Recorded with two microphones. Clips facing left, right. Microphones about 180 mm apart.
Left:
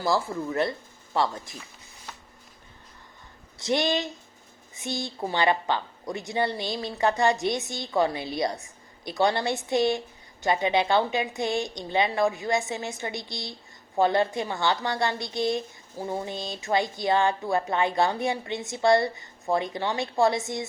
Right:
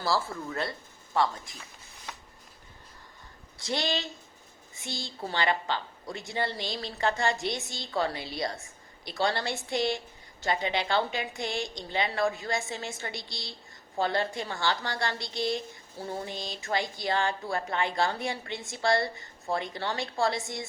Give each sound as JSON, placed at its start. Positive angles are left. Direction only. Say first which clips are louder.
{"t": 0.0, "sound": "a woman's voice", "louder": "left 4 dB", "side_deg": 20}
{"t": 3.6, "sound": "a woman's voice", "louder": "left 6 dB", "side_deg": 20}